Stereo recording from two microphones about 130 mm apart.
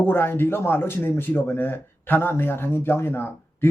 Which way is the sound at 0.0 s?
15° left (ahead or behind).